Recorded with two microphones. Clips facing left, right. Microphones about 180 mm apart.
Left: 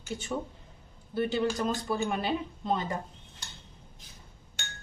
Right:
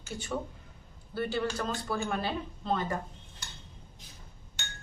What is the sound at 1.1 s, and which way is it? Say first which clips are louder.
A woman's voice: left 3 dB; 20° left (ahead or behind).